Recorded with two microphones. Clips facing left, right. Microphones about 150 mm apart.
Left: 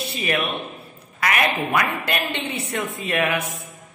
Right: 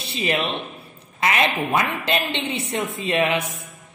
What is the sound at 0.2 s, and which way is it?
A woman's voice, 25° right (ahead or behind).